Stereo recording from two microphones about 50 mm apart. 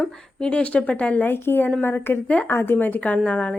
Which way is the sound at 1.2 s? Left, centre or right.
Left.